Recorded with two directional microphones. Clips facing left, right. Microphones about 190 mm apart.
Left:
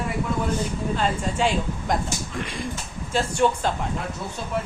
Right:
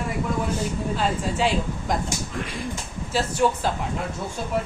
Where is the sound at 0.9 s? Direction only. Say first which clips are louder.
Left 1 dB; 5° right (ahead or behind).